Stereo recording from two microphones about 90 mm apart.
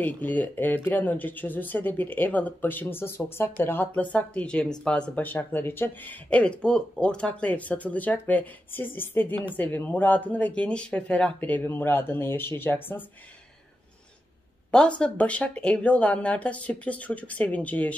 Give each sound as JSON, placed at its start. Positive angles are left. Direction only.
{"t": 0.0, "sound": "speech", "side_deg": 20}
{"t": 6.4, "sound": "speech", "side_deg": 10}
{"t": 14.7, "sound": "speech", "side_deg": 10}